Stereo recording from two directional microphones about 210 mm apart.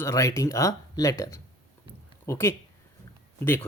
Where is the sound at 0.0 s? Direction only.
15° left (ahead or behind).